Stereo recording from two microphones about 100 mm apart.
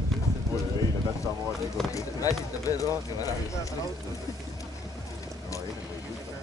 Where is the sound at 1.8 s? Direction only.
35° left (ahead or behind).